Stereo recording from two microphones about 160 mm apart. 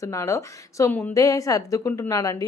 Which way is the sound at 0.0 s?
20° left (ahead or behind).